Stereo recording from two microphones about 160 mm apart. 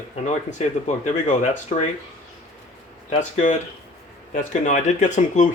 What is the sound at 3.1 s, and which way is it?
Speech, 45° left (ahead or behind).